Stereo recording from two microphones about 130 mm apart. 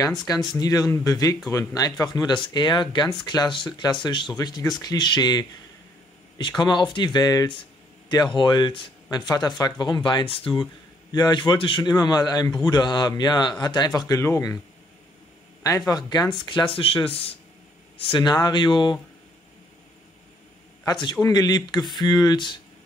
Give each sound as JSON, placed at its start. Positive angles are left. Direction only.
{"t": 0.6, "sound": "speech", "side_deg": 30}
{"t": 6.6, "sound": "speech", "side_deg": 35}
{"t": 16.1, "sound": "speech", "side_deg": 35}
{"t": 20.8, "sound": "speech", "side_deg": 35}